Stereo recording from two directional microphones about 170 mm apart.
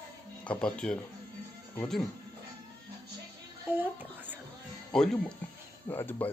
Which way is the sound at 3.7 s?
10° right (ahead or behind).